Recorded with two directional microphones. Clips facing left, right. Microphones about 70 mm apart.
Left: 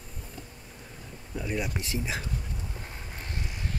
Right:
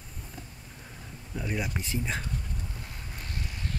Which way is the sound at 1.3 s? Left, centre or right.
Centre.